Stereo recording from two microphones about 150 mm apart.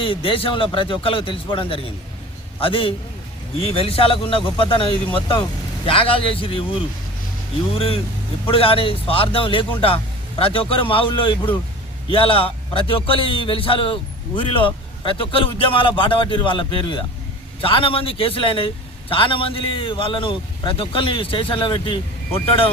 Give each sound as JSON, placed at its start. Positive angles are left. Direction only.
{"t": 0.0, "sound": "a man's voice", "side_deg": 35}
{"t": 7.8, "sound": "a man's voice", "side_deg": 40}